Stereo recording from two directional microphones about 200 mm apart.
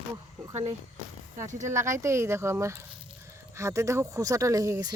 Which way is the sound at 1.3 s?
35° right (ahead or behind).